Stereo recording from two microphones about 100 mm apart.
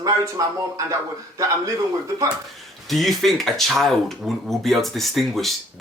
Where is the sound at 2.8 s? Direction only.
Centre (ahead or behind).